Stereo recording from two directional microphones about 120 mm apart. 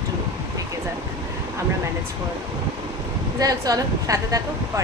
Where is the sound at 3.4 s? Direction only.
30° right (ahead or behind).